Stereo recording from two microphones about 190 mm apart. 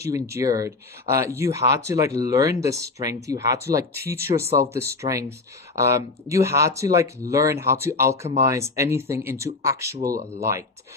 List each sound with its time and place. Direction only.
0.3 s speech: 15° right (ahead or behind)